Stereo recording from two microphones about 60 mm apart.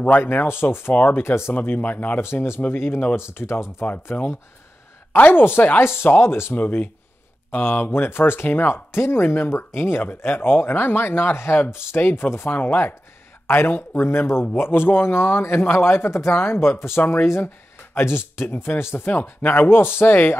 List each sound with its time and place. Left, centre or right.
0.2 s speech: left
1.5 s speech: left
2.2 s speech: left
3.8 s speech: left
6.5 s speech: left
17.0 s speech: left